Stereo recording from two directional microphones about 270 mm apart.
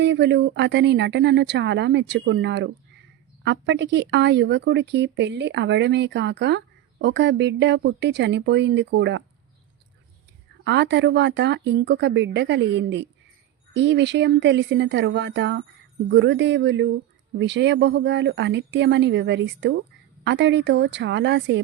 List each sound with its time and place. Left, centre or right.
0.0 s speech: right
10.6 s speech: right